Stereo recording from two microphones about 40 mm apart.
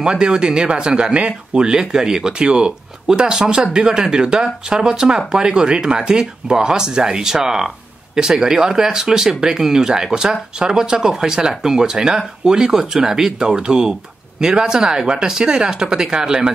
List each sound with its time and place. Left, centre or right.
0.0 s speech: centre